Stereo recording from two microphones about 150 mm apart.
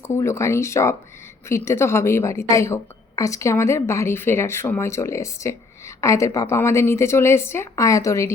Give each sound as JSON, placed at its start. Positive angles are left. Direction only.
{"t": 0.0, "sound": "a woman's voice", "side_deg": 20}